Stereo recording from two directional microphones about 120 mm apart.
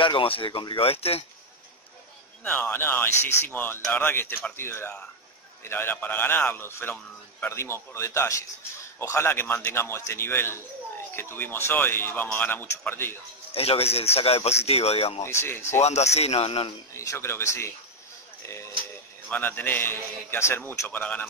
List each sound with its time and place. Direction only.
0.0 s speech: 50° left (ahead or behind)
2.4 s a man's voice: 15° left (ahead or behind)
13.5 s speech: 55° left (ahead or behind)
15.2 s a man's voice: 20° left (ahead or behind)
15.8 s speech: 65° left (ahead or behind)
16.9 s a man's voice: 20° left (ahead or behind)
19.2 s speech: 15° left (ahead or behind)